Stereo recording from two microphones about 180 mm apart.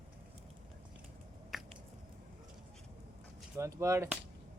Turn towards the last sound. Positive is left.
turn(degrees=-15)  # may be behind; listen again after turning